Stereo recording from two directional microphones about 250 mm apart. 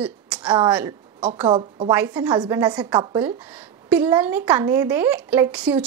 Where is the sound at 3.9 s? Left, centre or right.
Centre.